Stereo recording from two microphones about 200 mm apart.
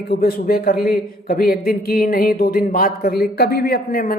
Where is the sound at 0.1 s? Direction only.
50° left (ahead or behind).